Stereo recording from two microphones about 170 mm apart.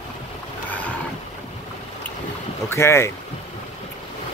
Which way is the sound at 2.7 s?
15° left (ahead or behind).